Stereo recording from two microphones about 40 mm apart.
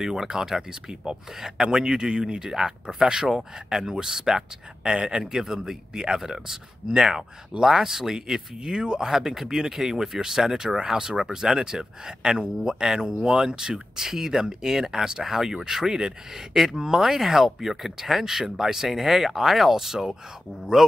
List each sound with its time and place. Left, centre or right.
0.0 s speech: centre
5.2 s speech: centre
9.0 s speech: centre